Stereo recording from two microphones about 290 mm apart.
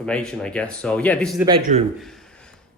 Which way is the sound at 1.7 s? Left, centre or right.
Right.